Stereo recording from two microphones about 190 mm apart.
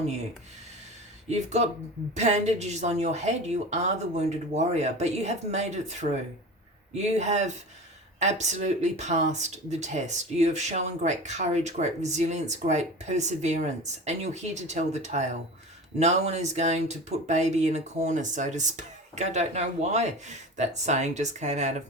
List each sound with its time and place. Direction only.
1.3 s speech: 35° right (ahead or behind)